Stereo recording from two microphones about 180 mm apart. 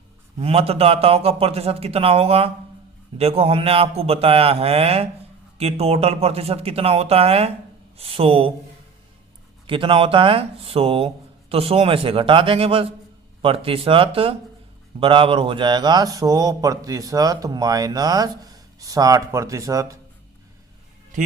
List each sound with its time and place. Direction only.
0.3 s speech: 35° right (ahead or behind)
9.6 s speech: 30° right (ahead or behind)